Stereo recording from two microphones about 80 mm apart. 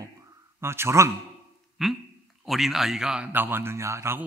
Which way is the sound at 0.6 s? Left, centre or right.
Right.